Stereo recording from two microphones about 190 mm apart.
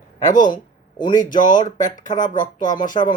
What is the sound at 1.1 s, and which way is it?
Speech, 45° left (ahead or behind).